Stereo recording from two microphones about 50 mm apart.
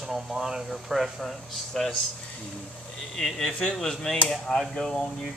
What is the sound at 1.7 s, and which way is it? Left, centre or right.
Speech, centre.